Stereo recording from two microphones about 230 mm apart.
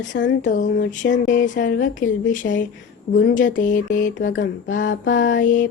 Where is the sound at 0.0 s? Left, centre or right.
Left.